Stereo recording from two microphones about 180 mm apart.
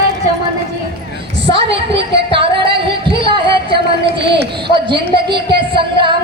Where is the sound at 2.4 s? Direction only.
30° right (ahead or behind).